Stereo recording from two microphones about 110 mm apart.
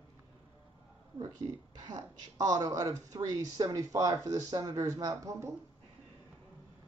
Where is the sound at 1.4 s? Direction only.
45° right (ahead or behind).